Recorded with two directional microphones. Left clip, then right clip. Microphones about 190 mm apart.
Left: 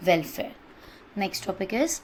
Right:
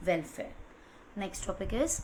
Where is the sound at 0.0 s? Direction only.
30° left (ahead or behind).